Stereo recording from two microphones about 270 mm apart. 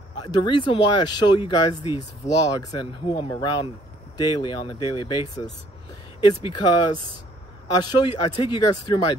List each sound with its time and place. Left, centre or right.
0.2 s speech: centre